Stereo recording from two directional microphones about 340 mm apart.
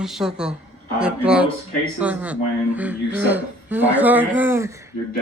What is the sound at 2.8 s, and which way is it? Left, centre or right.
Speech, centre.